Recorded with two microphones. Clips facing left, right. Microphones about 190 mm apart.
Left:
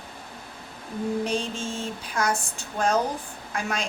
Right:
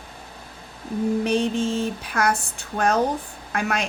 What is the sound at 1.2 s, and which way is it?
Speech, 60° right (ahead or behind).